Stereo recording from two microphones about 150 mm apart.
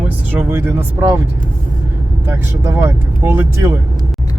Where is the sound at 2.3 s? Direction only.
15° right (ahead or behind).